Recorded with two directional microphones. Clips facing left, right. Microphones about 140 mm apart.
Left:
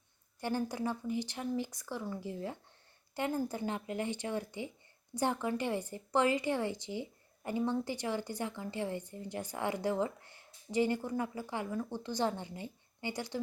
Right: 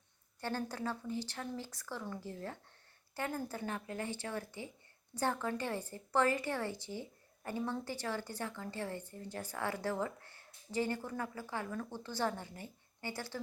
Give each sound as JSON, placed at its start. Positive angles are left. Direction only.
{"t": 0.3, "sound": "a woman's voice", "side_deg": 15}